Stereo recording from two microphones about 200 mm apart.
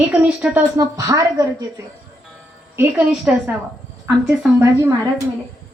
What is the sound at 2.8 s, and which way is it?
A woman's voice, 5° right (ahead or behind).